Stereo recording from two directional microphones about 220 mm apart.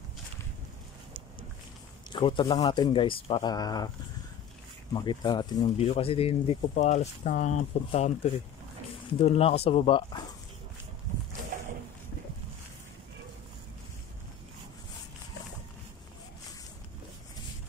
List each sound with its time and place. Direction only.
2.0 s speech: 20° left (ahead or behind)
4.9 s speech: 20° left (ahead or behind)